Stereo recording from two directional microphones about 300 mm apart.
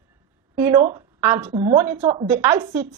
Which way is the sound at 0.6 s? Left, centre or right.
Centre.